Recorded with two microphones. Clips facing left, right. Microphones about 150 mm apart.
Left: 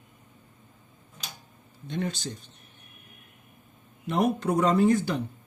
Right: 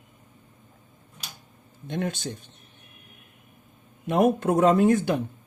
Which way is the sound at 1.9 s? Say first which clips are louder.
Right 2 dB; 55° right (ahead or behind).